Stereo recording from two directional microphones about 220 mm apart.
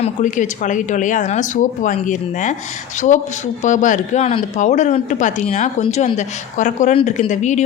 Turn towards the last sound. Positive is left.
turn(degrees=35)  # may be behind; listen again after turning